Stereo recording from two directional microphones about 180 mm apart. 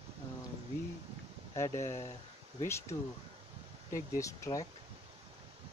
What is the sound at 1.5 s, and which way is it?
Speech, 15° left (ahead or behind).